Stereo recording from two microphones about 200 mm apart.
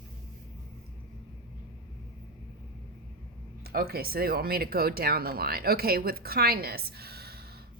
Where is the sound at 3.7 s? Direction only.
50° right (ahead or behind).